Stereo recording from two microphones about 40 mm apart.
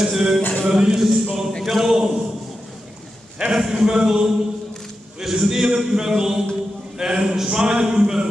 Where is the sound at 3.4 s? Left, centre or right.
Centre.